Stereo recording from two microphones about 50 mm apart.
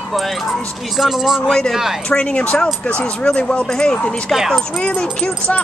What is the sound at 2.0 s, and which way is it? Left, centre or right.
Speech, left.